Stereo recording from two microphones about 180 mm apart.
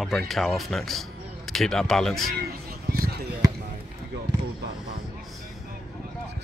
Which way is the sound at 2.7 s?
55° right (ahead or behind).